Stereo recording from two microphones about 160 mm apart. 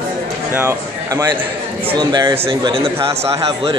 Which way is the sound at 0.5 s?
20° right (ahead or behind).